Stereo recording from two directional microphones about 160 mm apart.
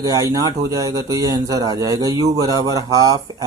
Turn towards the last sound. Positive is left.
turn(degrees=-20)  # may be behind; listen again after turning